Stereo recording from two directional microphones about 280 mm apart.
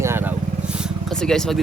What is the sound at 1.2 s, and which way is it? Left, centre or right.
Speech, centre.